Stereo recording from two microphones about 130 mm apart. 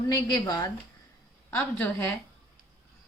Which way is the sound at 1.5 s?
15° left (ahead or behind).